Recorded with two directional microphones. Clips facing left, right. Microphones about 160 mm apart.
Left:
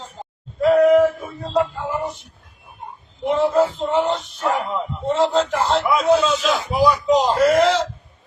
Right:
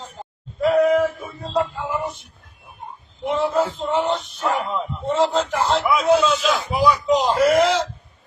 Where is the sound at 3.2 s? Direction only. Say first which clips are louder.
Left 3 dB; centre (ahead or behind).